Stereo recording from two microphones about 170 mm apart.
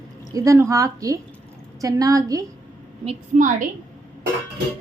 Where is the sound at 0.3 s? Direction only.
20° right (ahead or behind).